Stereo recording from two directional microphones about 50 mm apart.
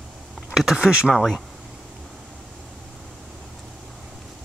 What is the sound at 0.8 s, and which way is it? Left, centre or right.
Speech, centre.